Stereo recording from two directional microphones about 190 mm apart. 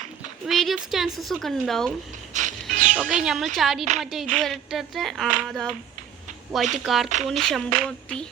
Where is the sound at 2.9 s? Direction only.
Centre (ahead or behind).